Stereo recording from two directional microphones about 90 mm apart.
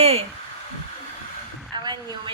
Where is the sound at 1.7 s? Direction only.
60° right (ahead or behind).